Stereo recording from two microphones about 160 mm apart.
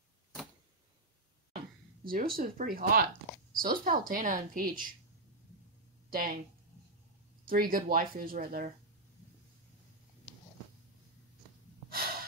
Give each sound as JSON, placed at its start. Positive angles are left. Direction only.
{"t": 2.0, "sound": "a woman's voice", "side_deg": -65}
{"t": 6.0, "sound": "speech", "side_deg": -65}
{"t": 7.4, "sound": "a woman's voice", "side_deg": -65}
{"t": 11.9, "sound": "gasp", "side_deg": -65}